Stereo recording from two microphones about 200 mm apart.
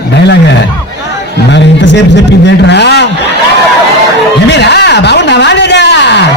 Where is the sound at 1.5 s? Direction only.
60° left (ahead or behind).